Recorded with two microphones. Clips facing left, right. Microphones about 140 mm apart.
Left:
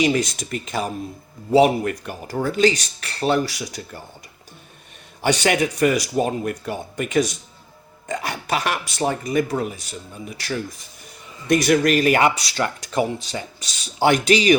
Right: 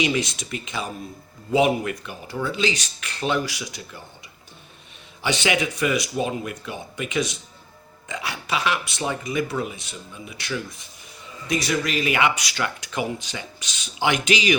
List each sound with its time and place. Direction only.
0.0 s speech: 45° left (ahead or behind)
5.2 s speech: 45° left (ahead or behind)
11.4 s speech: 55° left (ahead or behind); by 14.6 s 40° left (ahead or behind)